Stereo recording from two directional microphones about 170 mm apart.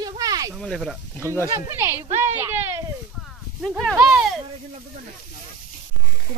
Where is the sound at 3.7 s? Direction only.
Centre (ahead or behind).